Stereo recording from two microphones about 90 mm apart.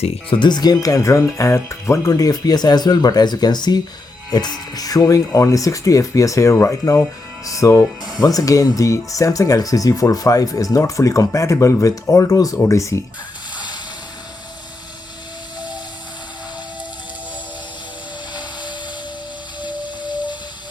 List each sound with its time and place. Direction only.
0.3 s speech: 60° left (ahead or behind); by 13.0 s 35° left (ahead or behind)
20.0 s music: 55° left (ahead or behind)